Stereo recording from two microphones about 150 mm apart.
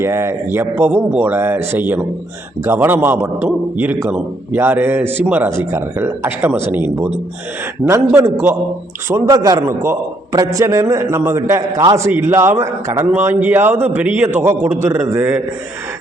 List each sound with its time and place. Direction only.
0.0 s a man's voice: 15° right (ahead or behind)